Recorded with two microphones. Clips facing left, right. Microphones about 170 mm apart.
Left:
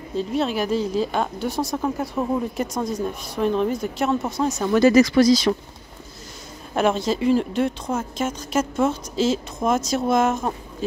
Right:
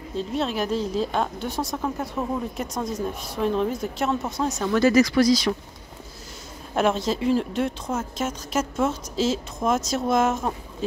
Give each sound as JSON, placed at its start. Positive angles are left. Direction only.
{"t": 0.3, "sound": "speech", "side_deg": 0}
{"t": 4.7, "sound": "speech", "side_deg": 25}
{"t": 6.7, "sound": "speech", "side_deg": 0}